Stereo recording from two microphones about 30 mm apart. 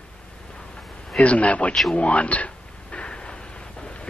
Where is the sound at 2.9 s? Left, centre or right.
Left.